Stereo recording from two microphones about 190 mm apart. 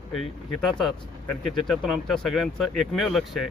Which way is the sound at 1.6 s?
Centre (ahead or behind).